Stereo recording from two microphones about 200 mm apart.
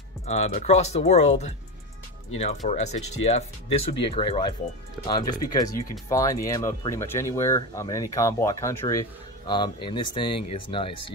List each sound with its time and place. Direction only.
0.3 s speech: 35° left (ahead or behind)